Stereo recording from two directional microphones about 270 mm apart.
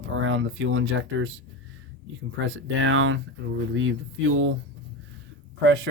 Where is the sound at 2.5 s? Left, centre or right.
Right.